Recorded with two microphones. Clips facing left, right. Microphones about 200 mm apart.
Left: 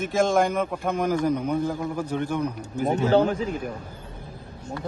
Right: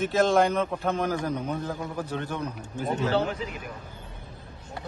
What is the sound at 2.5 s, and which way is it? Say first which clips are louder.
A man's voice: left 5 dB; 40° left (ahead or behind).